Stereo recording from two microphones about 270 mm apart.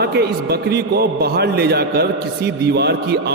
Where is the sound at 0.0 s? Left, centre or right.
Right.